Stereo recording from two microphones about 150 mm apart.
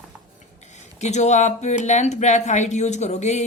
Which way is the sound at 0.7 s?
50° left (ahead or behind).